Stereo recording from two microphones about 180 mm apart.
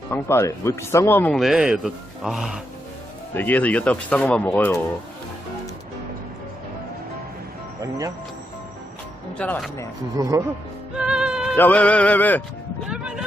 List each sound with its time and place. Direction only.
0.1 s speech: 15° left (ahead or behind); by 2.6 s 5° right (ahead or behind)
3.3 s speech: 10° left (ahead or behind)
7.8 s speech: 20° right (ahead or behind)
9.4 s speech: 10° left (ahead or behind)
10.2 s speech: 15° right (ahead or behind)
10.9 s music: 5° right (ahead or behind)
11.5 s speech: 10° left (ahead or behind)
12.9 s speech: 5° right (ahead or behind)